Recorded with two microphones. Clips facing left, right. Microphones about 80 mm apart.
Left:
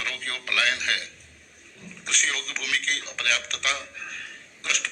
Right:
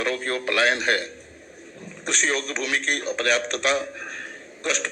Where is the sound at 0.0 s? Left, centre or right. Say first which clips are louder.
Right 9 dB; right.